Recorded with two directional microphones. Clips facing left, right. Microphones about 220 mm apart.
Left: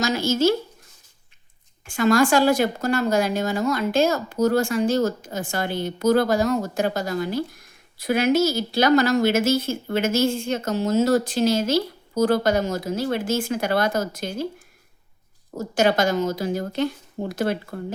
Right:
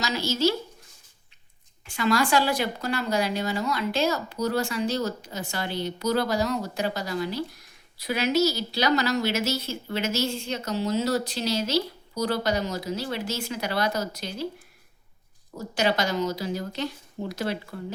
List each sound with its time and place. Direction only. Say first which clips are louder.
0.0 s a woman's voice: left 5 dB; 50° left (ahead or behind)
1.8 s a woman's voice: left 6 dB; 50° left (ahead or behind)
15.5 s a woman's voice: left 5 dB; 45° left (ahead or behind)